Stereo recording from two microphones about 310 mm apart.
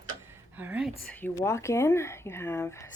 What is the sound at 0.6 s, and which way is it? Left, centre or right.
Speech, centre.